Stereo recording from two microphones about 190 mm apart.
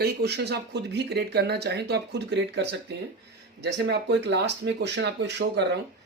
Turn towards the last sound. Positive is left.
turn(degrees=-65)  # may be behind; listen again after turning